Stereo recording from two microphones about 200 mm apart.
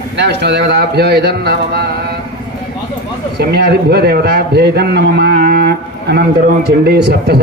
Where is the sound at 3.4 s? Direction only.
55° right (ahead or behind).